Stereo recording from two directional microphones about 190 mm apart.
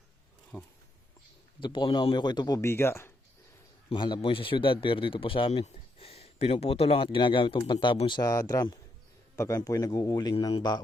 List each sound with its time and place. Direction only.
0.5 s speech: 10° left (ahead or behind)
1.6 s a man's voice: 25° left (ahead or behind)
3.8 s a man's voice: 25° left (ahead or behind)